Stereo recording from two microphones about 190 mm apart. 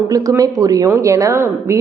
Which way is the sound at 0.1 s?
20° right (ahead or behind).